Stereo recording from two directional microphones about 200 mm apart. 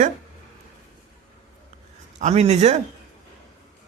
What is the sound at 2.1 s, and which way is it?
Speech, 35° right (ahead or behind).